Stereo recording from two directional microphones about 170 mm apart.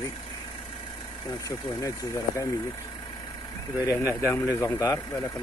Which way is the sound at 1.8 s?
20° left (ahead or behind).